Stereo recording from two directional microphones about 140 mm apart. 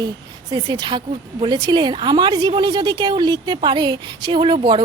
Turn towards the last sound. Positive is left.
turn(degrees=-35)  # may be behind; listen again after turning